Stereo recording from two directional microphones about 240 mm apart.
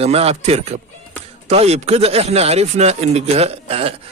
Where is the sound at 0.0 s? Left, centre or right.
Right.